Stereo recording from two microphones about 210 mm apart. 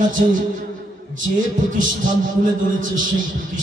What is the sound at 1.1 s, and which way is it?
A man's voice, 40° right (ahead or behind).